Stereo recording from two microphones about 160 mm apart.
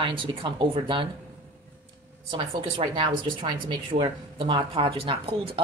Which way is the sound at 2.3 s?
30° right (ahead or behind).